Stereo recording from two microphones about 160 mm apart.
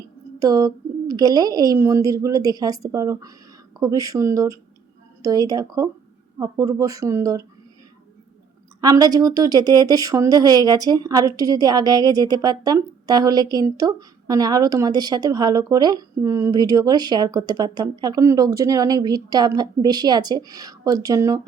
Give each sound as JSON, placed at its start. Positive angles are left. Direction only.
{"t": 0.3, "sound": "speech", "side_deg": -20}
{"t": 8.8, "sound": "speech", "side_deg": -25}